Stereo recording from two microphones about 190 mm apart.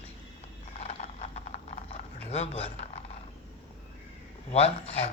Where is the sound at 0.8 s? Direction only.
35° left (ahead or behind).